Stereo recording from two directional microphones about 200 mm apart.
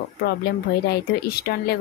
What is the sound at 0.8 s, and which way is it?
Speech, 50° left (ahead or behind).